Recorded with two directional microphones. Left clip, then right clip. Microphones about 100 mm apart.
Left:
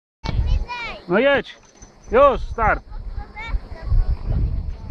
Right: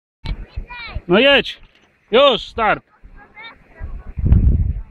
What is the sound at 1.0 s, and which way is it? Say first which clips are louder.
Speech: right 5 dB; 30° right (ahead or behind).